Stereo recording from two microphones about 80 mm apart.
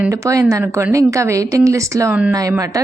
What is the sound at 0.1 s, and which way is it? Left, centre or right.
A woman's voice, right.